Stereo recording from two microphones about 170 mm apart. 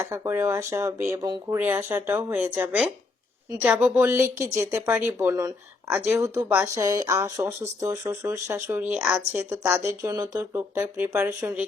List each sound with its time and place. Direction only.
0.1 s speech: 15° right (ahead or behind)